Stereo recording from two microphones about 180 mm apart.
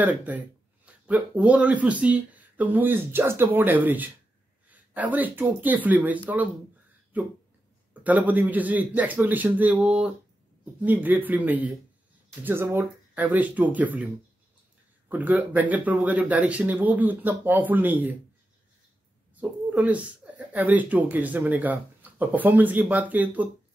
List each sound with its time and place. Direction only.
0.0 s speech: 10° right (ahead or behind)
15.0 s speech: 10° right (ahead or behind)
19.7 s speech: 10° right (ahead or behind)